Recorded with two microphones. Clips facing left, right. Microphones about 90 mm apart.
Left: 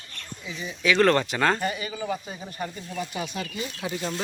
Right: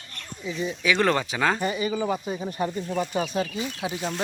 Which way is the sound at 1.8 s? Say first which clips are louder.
Right 5 dB; 30° right (ahead or behind).